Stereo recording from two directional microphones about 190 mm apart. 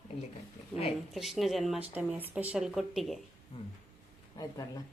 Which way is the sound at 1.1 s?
Centre (ahead or behind).